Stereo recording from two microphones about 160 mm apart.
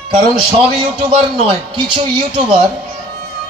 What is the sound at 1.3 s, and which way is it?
A man's voice, 35° right (ahead or behind).